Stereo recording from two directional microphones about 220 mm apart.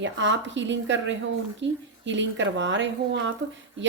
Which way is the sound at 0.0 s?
55° right (ahead or behind).